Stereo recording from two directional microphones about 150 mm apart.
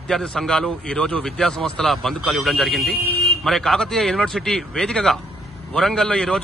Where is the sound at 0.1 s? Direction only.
5° left (ahead or behind).